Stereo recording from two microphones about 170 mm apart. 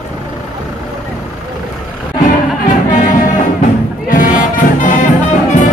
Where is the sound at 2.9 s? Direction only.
50° left (ahead or behind).